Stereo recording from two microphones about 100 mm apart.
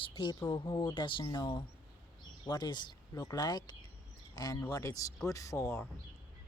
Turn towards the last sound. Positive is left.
turn(degrees=25)  # may be behind; listen again after turning